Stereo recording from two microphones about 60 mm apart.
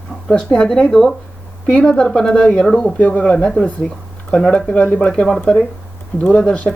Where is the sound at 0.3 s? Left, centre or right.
Centre.